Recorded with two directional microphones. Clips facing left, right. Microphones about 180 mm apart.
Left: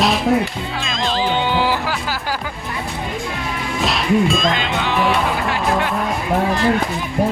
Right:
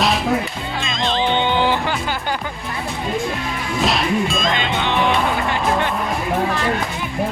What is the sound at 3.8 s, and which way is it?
Speech, centre (ahead or behind).